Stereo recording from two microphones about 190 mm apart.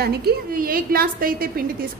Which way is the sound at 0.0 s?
55° right (ahead or behind).